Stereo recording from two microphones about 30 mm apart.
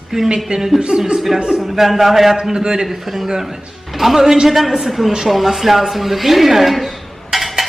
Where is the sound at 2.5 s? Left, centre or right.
Right.